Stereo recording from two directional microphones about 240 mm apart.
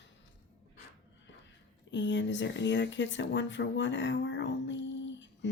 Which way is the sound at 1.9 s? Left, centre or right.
Left.